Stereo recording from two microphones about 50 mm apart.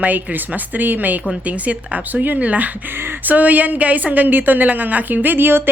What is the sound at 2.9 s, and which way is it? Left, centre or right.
Speech, right.